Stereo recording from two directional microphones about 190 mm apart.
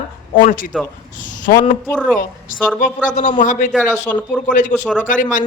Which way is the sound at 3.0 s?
40° left (ahead or behind).